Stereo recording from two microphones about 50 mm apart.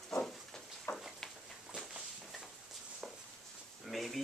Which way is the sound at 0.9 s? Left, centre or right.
Left.